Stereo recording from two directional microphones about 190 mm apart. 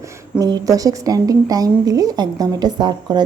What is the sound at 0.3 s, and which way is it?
A woman's voice, 20° right (ahead or behind).